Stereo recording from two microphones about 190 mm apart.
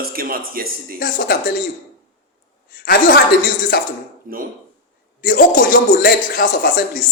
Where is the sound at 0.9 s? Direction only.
50° left (ahead or behind).